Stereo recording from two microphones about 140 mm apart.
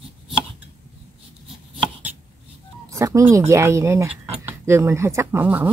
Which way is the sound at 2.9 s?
20° right (ahead or behind).